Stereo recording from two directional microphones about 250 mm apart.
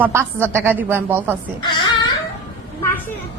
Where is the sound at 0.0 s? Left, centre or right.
Centre.